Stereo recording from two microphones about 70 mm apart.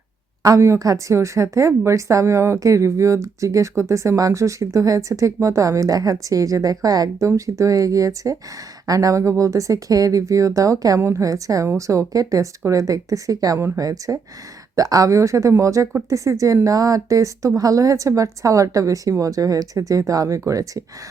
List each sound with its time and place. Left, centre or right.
0.4 s a woman's voice: right
7.3 s a woman's voice: right